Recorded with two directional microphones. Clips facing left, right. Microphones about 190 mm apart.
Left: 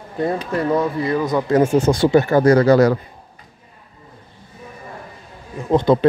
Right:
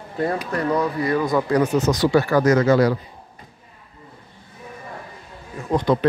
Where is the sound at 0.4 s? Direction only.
25° left (ahead or behind).